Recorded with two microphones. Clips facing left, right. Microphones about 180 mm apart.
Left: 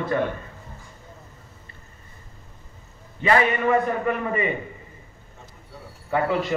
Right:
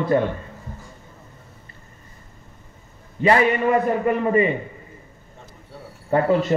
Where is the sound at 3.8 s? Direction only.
30° right (ahead or behind).